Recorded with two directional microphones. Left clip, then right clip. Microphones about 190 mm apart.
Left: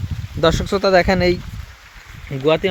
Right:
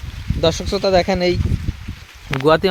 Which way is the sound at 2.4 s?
30° right (ahead or behind).